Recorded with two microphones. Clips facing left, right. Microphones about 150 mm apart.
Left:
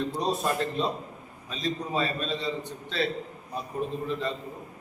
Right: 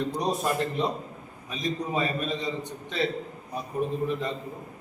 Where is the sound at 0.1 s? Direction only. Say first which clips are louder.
Even; 15° right (ahead or behind).